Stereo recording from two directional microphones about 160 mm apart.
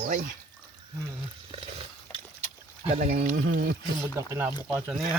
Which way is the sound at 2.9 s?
55° right (ahead or behind).